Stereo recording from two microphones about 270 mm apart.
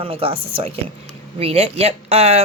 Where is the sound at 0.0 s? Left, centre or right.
Right.